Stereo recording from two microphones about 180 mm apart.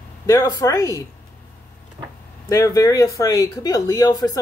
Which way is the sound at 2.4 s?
20° left (ahead or behind).